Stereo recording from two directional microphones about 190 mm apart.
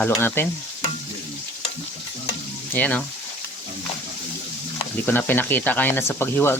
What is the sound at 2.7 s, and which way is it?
Speech, 10° left (ahead or behind).